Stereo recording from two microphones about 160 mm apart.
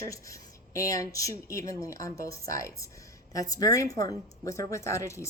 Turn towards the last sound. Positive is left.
turn(degrees=20)  # may be behind; listen again after turning